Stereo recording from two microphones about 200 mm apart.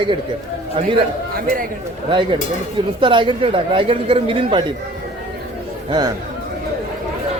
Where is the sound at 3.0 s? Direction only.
25° right (ahead or behind).